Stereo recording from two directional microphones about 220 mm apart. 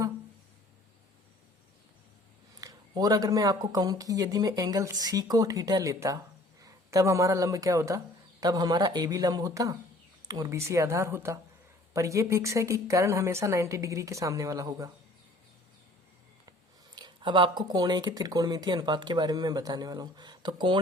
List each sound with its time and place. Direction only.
2.6 s speech: 15° right (ahead or behind)
16.5 s speech: 20° right (ahead or behind)